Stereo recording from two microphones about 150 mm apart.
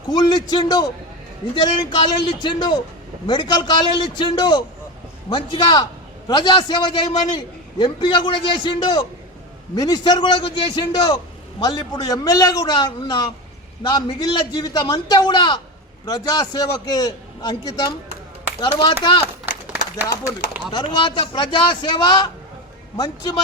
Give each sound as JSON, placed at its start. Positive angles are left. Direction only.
{"t": 0.1, "sound": "a man's voice", "side_deg": 30}
{"t": 20.7, "sound": "a man's voice", "side_deg": 35}